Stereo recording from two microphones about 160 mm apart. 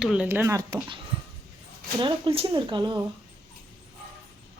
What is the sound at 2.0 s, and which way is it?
Speech, 30° right (ahead or behind).